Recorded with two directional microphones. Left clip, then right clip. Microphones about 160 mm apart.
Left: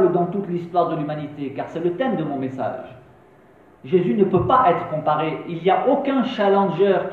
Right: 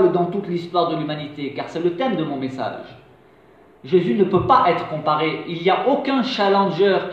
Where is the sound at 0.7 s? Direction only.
35° right (ahead or behind).